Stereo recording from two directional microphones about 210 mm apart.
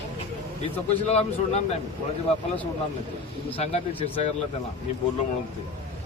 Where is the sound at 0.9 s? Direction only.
30° left (ahead or behind).